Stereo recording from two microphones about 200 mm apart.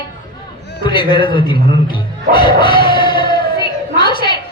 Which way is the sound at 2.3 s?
25° left (ahead or behind).